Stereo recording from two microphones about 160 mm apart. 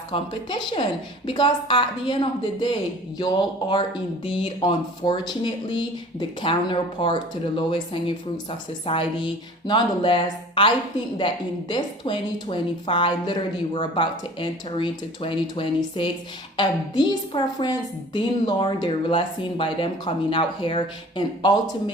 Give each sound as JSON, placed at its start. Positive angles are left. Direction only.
{"t": 0.1, "sound": "a woman's voice", "side_deg": 30}
{"t": 11.7, "sound": "a woman's voice", "side_deg": 30}